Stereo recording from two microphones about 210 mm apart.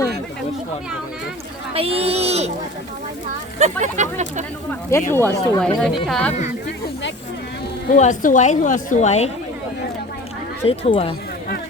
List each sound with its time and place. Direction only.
1.7 s speech: 25° right (ahead or behind)
3.6 s speech: 35° right (ahead or behind)
4.9 s speech: 10° left (ahead or behind)
7.9 s a woman's voice: 35° left (ahead or behind)
10.7 s speech: 25° left (ahead or behind)